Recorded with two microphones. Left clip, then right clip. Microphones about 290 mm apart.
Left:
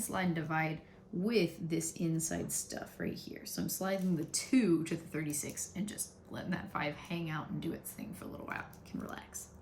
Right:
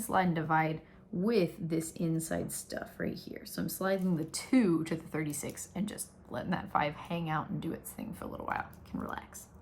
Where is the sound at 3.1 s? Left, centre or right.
Centre.